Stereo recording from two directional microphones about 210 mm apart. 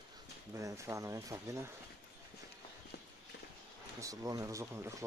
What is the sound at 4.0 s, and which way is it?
Speech, 15° right (ahead or behind).